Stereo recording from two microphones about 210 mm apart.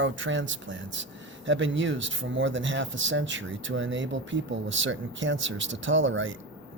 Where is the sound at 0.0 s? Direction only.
65° right (ahead or behind).